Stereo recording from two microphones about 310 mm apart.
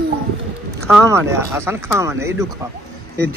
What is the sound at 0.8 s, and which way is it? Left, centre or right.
Speech, centre.